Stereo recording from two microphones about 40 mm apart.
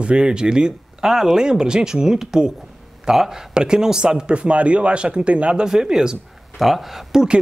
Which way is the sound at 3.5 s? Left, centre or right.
Right.